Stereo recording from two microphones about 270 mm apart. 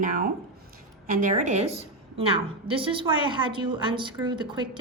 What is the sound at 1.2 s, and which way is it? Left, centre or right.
A woman's voice, right.